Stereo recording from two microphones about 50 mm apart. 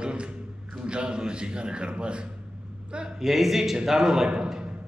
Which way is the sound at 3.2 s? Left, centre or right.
Centre.